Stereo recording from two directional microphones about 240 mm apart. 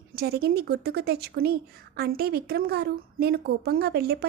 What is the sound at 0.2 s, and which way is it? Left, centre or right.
Speech, right.